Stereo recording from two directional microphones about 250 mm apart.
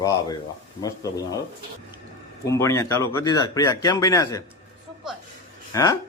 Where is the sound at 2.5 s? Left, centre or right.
Centre.